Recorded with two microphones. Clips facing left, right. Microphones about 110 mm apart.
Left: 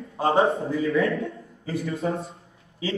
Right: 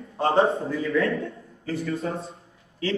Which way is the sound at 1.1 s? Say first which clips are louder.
Even; centre (ahead or behind).